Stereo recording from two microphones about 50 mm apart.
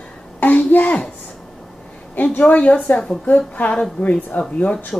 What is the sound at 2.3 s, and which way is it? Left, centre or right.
A woman's voice, left.